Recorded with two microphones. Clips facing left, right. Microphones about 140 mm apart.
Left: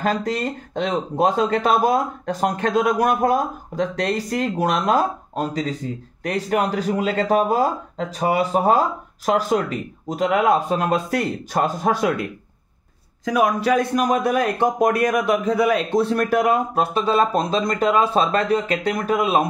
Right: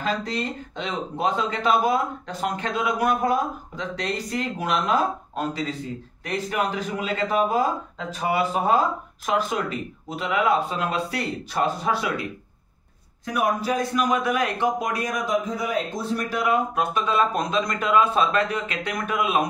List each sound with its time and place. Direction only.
0.0 s speech: 45° left (ahead or behind)
13.2 s speech: 90° left; by 13.8 s 75° left (ahead or behind)
13.9 s speech: 40° left (ahead or behind)